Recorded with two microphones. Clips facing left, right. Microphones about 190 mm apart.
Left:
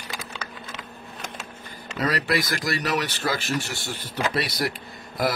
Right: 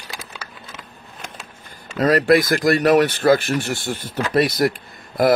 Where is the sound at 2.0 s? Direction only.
50° right (ahead or behind).